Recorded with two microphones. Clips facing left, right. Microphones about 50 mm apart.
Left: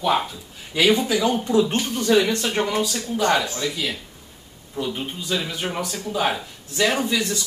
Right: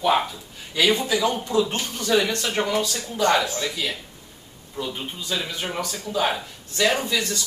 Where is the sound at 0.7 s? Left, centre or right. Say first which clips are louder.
Left 2 dB; centre.